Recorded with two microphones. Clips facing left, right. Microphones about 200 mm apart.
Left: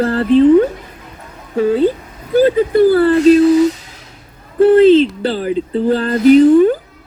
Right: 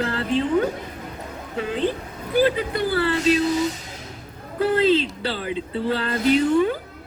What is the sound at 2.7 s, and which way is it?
Speech, 50° left (ahead or behind).